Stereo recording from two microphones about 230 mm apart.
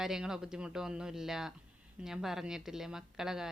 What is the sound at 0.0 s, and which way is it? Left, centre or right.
Speech, centre.